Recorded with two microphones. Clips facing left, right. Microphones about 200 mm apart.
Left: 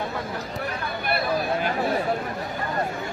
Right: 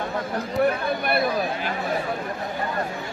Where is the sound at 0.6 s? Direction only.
55° right (ahead or behind).